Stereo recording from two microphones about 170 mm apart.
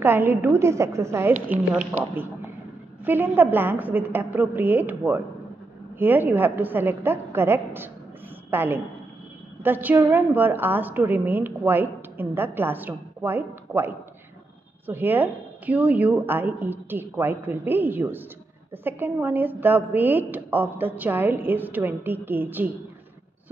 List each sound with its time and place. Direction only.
0.0 s a woman's voice: 15° right (ahead or behind)
3.1 s a woman's voice: 10° right (ahead or behind)